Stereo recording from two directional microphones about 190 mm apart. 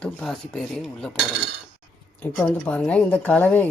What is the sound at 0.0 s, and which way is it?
Speech, 5° left (ahead or behind).